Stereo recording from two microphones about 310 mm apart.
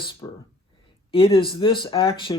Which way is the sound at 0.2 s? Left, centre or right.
Centre.